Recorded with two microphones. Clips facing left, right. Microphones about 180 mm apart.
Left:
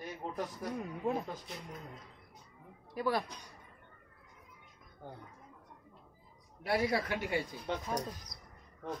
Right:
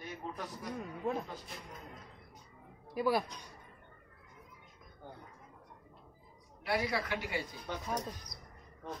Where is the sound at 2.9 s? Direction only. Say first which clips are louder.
Right 2 dB; 10° right (ahead or behind).